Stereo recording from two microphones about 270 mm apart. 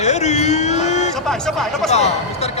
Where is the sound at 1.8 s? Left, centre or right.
Left.